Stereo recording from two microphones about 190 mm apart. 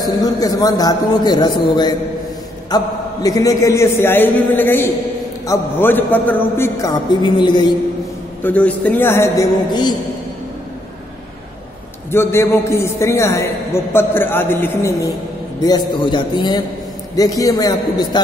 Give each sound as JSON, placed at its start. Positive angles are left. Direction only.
{"t": 0.0, "sound": "a man's voice", "side_deg": 20}
{"t": 8.4, "sound": "a man's voice", "side_deg": 10}
{"t": 12.1, "sound": "a man's voice", "side_deg": 15}